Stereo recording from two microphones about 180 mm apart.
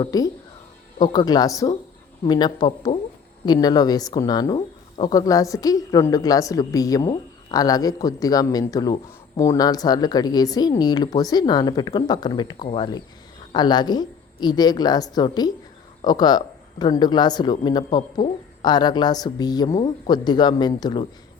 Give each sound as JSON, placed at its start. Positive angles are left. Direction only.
{"t": 0.0, "sound": "speech", "side_deg": 20}